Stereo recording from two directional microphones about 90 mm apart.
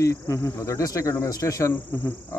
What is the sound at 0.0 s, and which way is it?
Speech, 35° left (ahead or behind).